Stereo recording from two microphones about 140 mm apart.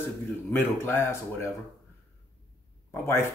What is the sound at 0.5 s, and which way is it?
A man's voice, 15° left (ahead or behind).